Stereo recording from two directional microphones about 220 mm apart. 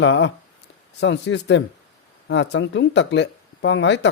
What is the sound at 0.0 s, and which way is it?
A man's voice, 55° left (ahead or behind).